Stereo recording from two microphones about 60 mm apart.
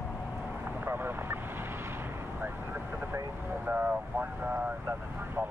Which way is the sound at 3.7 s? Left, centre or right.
Right.